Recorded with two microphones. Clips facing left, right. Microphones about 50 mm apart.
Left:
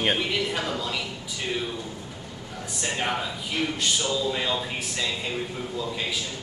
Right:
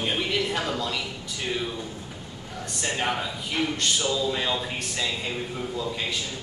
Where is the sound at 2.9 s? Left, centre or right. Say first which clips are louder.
Even; centre.